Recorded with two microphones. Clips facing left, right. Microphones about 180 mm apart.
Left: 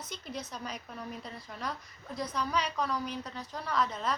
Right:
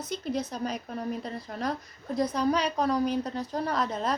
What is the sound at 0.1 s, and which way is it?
A woman's voice, 35° right (ahead or behind).